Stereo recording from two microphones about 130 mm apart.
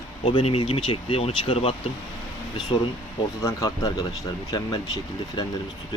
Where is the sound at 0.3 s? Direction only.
45° left (ahead or behind).